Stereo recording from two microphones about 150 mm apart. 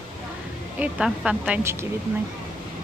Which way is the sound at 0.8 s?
5° right (ahead or behind).